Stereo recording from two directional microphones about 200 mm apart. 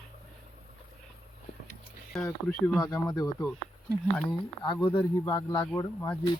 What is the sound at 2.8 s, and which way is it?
Speech, 20° left (ahead or behind).